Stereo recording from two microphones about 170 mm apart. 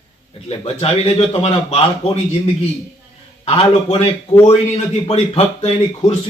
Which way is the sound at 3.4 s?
35° left (ahead or behind).